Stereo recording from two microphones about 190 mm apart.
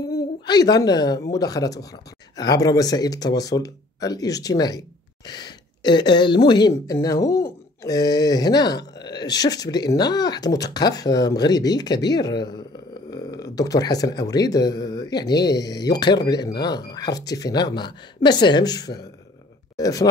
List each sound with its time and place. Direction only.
0.0 s a woman's voice: 20° left (ahead or behind)